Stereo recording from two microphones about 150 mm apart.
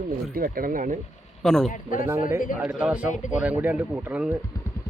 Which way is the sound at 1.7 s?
60° left (ahead or behind).